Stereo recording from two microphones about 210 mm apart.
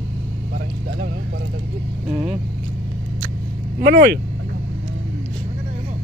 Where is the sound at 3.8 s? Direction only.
50° right (ahead or behind).